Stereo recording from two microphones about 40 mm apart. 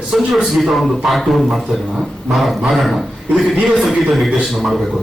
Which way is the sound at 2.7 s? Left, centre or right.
Centre.